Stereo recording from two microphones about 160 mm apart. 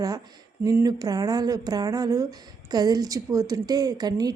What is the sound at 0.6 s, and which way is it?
Speech, 20° right (ahead or behind).